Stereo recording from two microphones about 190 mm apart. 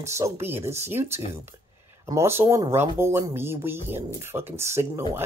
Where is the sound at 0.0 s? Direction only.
15° right (ahead or behind).